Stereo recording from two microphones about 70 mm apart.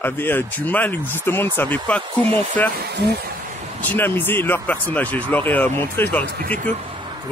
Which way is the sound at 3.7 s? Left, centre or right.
Left.